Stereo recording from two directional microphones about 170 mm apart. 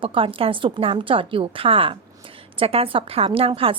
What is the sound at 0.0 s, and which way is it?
Speech, 30° right (ahead or behind).